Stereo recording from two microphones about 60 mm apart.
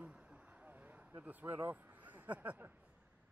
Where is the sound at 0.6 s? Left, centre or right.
Right.